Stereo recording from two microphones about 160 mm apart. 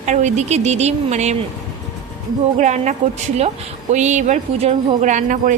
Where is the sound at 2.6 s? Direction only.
50° right (ahead or behind).